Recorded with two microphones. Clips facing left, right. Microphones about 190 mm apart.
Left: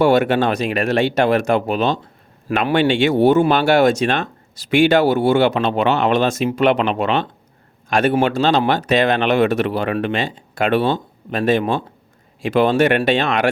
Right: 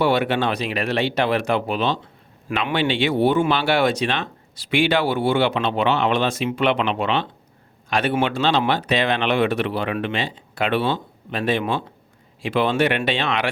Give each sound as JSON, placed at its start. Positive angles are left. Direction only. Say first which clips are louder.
{"t": 0.0, "sound": "speech", "louder": "left 5 dB", "side_deg": 45}